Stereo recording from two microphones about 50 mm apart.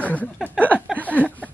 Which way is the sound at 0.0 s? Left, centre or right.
Left.